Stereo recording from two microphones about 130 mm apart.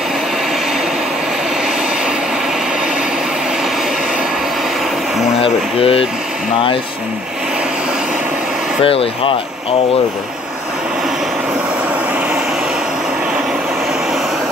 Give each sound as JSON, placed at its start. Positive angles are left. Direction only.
{"t": 5.4, "sound": "speech", "side_deg": 45}
{"t": 8.8, "sound": "speech", "side_deg": 45}